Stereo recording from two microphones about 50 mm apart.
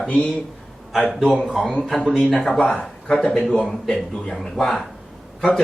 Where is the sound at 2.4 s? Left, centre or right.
Centre.